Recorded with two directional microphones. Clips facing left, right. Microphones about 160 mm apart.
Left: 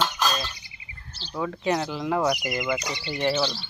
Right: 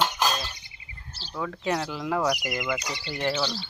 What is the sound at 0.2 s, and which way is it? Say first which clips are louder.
Bird: even; 10° right (ahead or behind).